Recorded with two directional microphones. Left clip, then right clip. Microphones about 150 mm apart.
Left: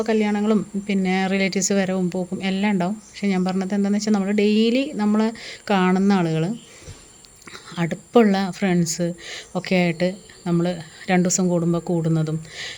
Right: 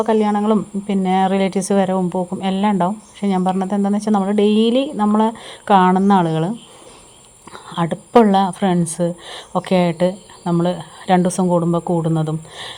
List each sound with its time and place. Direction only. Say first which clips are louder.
0.0 s speech: right 5 dB; 5° left (ahead or behind)
7.5 s whispering: right 6 dB; centre (ahead or behind)
8.1 s speech: right 5 dB; 5° left (ahead or behind)